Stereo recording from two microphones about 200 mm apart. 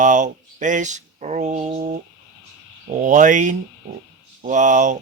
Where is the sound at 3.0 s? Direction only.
40° right (ahead or behind).